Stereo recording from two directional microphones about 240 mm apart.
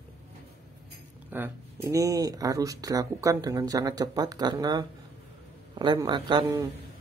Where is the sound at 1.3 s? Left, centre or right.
Centre.